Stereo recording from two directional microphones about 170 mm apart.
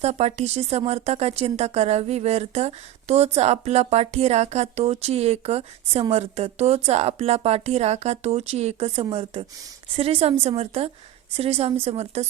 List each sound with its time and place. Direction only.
0.0 s speech: 40° right (ahead or behind)